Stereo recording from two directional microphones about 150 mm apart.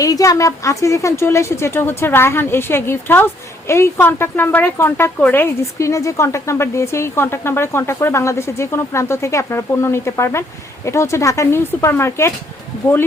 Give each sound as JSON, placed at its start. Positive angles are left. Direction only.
{"t": 0.0, "sound": "speech", "side_deg": 25}